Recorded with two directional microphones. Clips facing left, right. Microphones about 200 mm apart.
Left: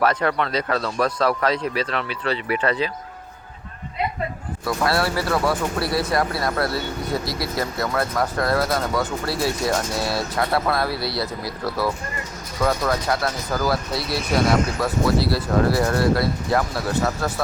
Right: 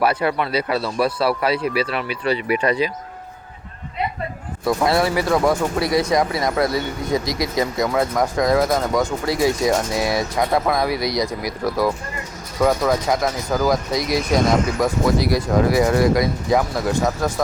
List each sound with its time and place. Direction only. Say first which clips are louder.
0.0 s speech: right 1 dB; 10° right (ahead or behind)
4.6 s speech: right 4 dB; 20° right (ahead or behind)